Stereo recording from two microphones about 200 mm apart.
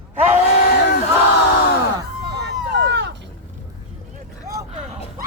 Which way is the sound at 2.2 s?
60° right (ahead or behind).